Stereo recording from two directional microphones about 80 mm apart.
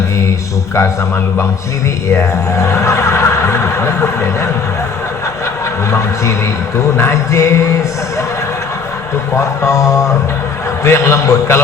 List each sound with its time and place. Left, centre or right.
0.2 s speech: left
5.9 s speech: left
9.3 s speech: left